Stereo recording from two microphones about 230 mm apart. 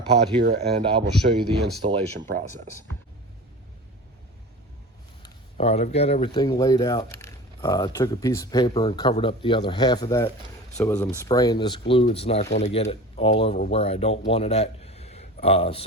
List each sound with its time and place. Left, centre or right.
0.4 s speech: right
0.9 s speech: right
5.2 s speech: left